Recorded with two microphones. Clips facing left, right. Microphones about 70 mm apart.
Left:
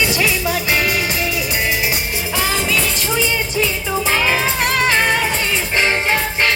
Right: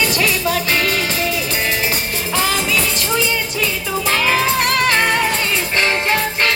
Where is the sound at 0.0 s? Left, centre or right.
Centre.